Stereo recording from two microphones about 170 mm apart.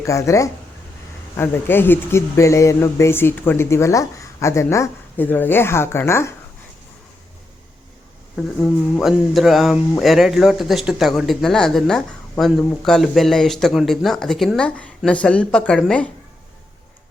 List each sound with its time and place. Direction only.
0.0 s speech: 20° left (ahead or behind)
8.4 s speech: centre (ahead or behind)